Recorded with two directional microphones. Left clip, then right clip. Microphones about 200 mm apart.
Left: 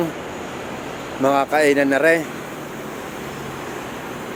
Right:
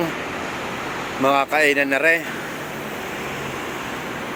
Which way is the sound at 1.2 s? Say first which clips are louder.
Left 1 dB; 25° left (ahead or behind).